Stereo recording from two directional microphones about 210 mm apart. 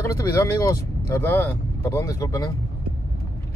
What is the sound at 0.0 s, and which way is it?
Speech, 15° left (ahead or behind).